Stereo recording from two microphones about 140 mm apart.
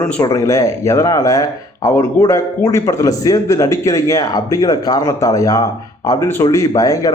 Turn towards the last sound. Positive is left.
turn(degrees=25)  # may be behind; listen again after turning